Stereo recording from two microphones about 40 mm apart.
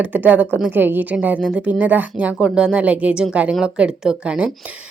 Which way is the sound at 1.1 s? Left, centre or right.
Right.